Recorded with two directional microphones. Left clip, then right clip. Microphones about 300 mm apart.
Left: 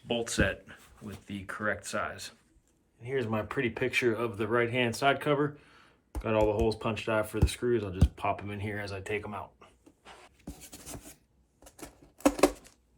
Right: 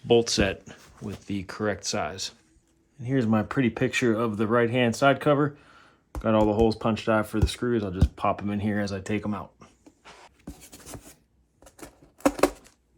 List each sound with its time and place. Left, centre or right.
0.1 s speech: centre
3.1 s speech: right
10.4 s a sound: centre